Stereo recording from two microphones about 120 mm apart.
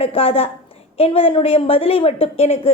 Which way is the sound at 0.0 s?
50° left (ahead or behind).